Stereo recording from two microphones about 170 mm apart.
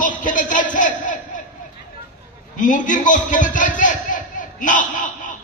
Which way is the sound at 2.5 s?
50° left (ahead or behind).